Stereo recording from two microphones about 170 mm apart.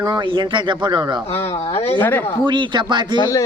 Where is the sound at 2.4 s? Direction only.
25° right (ahead or behind).